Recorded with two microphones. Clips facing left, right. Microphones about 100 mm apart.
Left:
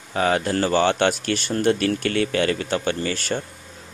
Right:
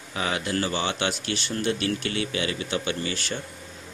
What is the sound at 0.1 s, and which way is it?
Speech, 45° left (ahead or behind).